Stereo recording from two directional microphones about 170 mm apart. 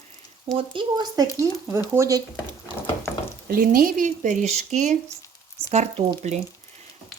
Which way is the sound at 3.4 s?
60° right (ahead or behind).